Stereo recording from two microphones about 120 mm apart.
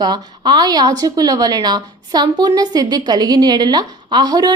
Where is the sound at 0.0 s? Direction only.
35° right (ahead or behind).